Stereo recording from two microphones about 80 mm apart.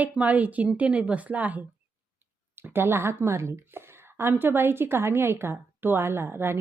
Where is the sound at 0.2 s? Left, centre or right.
Centre.